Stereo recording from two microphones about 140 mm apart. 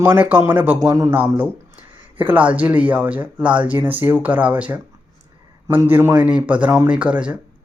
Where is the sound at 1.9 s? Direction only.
35° right (ahead or behind).